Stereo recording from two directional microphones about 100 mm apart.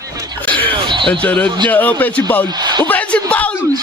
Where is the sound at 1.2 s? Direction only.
10° left (ahead or behind).